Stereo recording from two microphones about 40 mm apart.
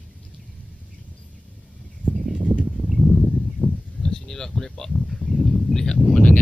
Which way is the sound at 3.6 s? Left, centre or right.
Centre.